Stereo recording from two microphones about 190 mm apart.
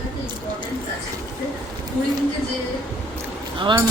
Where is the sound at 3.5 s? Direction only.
25° right (ahead or behind).